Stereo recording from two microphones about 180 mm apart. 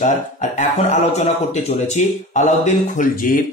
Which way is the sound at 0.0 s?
45° left (ahead or behind).